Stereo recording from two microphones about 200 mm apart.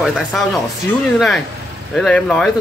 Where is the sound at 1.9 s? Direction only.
Centre (ahead or behind).